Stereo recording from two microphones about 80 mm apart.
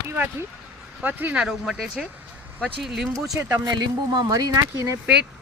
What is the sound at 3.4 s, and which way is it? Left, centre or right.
Speech, right.